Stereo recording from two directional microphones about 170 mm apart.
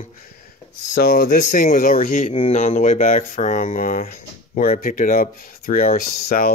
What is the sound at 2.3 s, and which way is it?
Speech, 35° left (ahead or behind).